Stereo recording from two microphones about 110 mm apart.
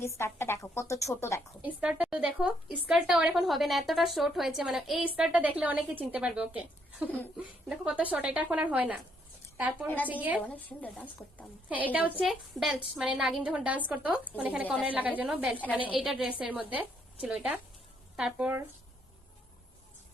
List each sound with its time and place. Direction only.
0.0 s speech: 25° left (ahead or behind)
1.6 s a woman's voice: 10° right (ahead or behind)
10.4 s speech: 15° left (ahead or behind)
11.8 s a woman's voice: 15° right (ahead or behind)
12.2 s a woman's voice: centre (ahead or behind)